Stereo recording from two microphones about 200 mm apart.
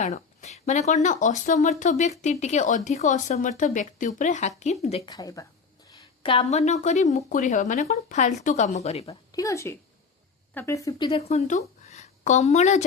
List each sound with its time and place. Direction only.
0.0 s speech: 35° left (ahead or behind)
5.1 s a woman's voice: 15° left (ahead or behind)
6.2 s speech: 30° left (ahead or behind)
9.3 s a woman's voice: 15° left (ahead or behind); by 12.8 s 35° left (ahead or behind)